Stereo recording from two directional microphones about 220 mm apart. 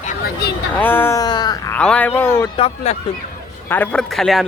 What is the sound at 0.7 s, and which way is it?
Speech, 10° left (ahead or behind).